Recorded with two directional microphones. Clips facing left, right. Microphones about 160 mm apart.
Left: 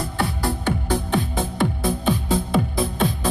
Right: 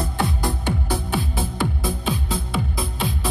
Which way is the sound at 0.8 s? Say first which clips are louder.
Left 3 dB; 5° right (ahead or behind).